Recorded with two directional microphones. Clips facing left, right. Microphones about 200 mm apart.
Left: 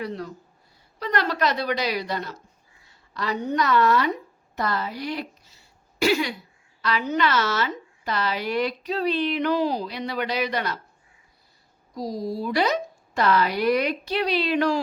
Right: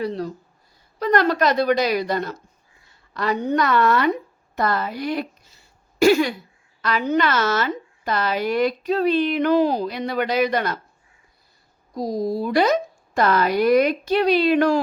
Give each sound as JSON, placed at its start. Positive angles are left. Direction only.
{"t": 0.0, "sound": "speech", "side_deg": -35}
{"t": 0.9, "sound": "a woman's voice", "side_deg": -45}
{"t": 11.9, "sound": "a woman's voice", "side_deg": -50}